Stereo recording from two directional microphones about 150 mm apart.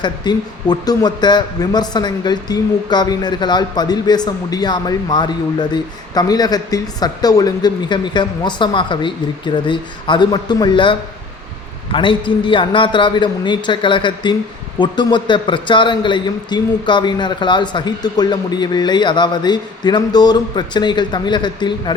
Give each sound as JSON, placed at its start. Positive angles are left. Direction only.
{"t": 0.0, "sound": "a man's voice", "side_deg": 30}